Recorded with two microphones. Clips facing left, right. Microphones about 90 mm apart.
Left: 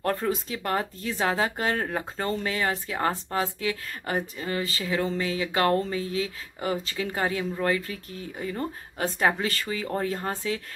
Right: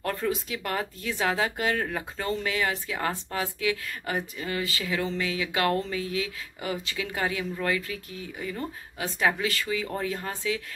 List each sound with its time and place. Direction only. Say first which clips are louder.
0.0 s speech: left 2 dB; 35° left (ahead or behind)